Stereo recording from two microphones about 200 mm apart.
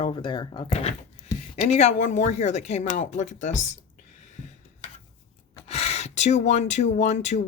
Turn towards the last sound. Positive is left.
turn(degrees=35)  # may be behind; listen again after turning